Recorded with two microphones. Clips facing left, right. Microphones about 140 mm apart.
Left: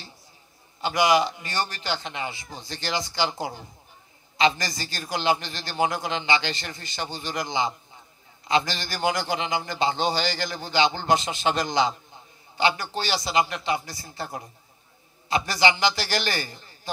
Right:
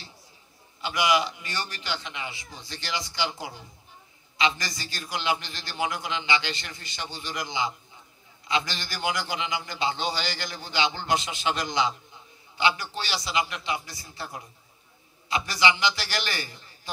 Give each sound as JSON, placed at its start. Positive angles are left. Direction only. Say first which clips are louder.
{"t": 0.7, "sound": "a man's voice", "louder": "left 4 dB", "side_deg": 40}